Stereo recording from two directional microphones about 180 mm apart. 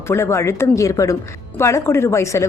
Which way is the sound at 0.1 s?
15° left (ahead or behind).